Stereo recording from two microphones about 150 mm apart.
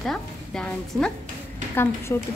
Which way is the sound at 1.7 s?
15° left (ahead or behind).